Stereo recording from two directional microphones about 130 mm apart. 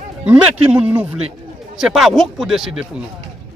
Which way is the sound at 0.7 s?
10° right (ahead or behind).